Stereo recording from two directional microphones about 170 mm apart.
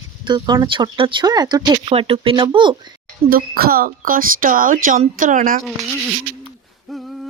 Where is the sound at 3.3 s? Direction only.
60° right (ahead or behind).